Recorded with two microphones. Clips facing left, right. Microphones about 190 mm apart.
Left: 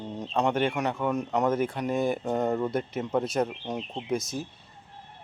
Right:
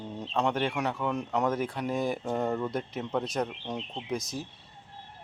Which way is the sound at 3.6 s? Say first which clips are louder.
Left 3 dB; 20° left (ahead or behind).